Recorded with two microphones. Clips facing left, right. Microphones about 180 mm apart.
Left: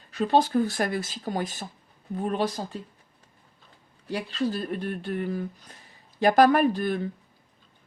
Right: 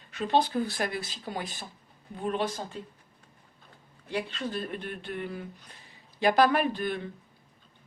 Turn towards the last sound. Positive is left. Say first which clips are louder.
# left 5 dB
turn(degrees=40)  # may be behind; listen again after turning